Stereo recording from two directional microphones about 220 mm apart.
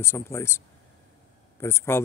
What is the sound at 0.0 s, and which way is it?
Speech, 10° left (ahead or behind).